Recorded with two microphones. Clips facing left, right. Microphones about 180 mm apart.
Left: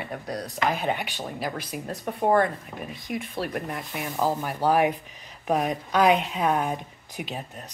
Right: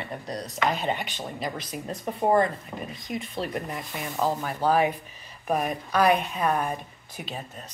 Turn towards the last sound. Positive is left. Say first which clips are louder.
# left 2 dB
turn(degrees=10)  # may be behind; listen again after turning